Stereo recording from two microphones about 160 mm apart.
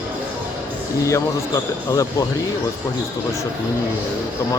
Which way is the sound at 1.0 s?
20° left (ahead or behind).